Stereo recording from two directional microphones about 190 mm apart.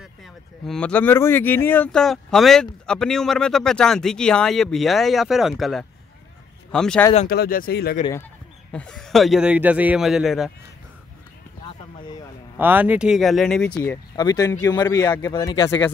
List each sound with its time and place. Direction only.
0.0 s speech: centre (ahead or behind)
7.2 s speech: 50° left (ahead or behind)
8.7 s speech: 5° left (ahead or behind)
11.6 s a sound: 20° left (ahead or behind)
12.5 s speech: 10° right (ahead or behind)
13.7 s speech: 20° left (ahead or behind)